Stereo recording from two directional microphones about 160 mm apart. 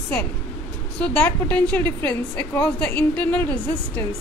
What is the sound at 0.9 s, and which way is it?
A woman's voice, 5° left (ahead or behind).